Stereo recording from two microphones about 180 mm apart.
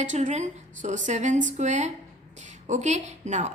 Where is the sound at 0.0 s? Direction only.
40° right (ahead or behind).